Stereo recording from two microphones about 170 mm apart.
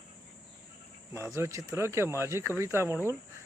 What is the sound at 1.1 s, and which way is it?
Speech, 15° right (ahead or behind).